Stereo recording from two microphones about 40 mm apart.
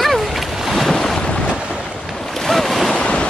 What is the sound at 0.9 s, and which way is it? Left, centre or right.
Boat, centre.